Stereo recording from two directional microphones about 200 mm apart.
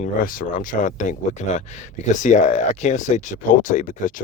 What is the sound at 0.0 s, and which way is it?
Speech, 45° left (ahead or behind).